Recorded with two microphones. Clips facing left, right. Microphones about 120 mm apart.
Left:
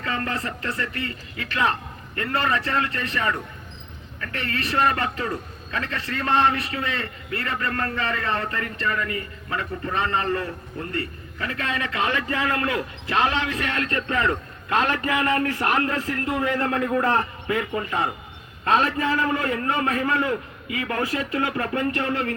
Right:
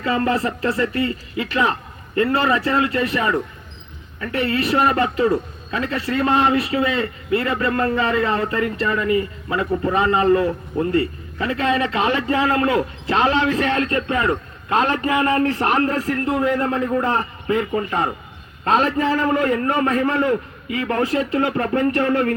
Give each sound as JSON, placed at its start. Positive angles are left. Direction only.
{"t": 0.0, "sound": "a man's voice", "side_deg": -25}
{"t": 16.2, "sound": "a man's voice", "side_deg": -25}
{"t": 16.6, "sound": "a man's voice", "side_deg": -5}
{"t": 17.0, "sound": "a man's voice", "side_deg": -15}
{"t": 17.5, "sound": "a man's voice", "side_deg": -30}